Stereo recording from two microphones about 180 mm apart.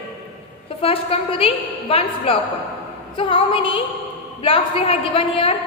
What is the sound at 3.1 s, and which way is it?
Female singing, 30° left (ahead or behind).